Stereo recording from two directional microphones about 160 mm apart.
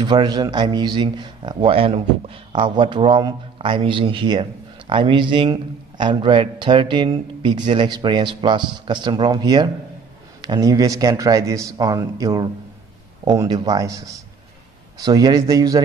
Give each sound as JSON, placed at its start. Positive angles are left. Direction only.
{"t": 0.0, "sound": "a man's voice", "side_deg": -30}